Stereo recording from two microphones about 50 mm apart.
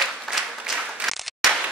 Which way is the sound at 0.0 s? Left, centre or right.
Centre.